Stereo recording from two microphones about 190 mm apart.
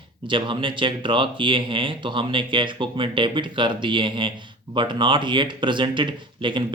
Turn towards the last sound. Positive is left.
turn(degrees=-25)  # may be behind; listen again after turning